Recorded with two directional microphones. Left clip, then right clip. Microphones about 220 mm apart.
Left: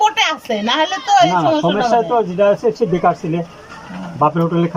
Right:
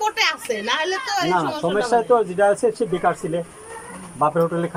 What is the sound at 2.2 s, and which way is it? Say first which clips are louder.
Speech: left 4 dB; 5° left (ahead or behind).